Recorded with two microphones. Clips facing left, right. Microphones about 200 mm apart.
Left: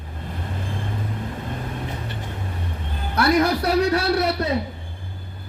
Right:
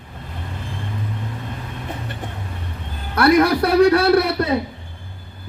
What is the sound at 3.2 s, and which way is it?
Speech, 60° right (ahead or behind).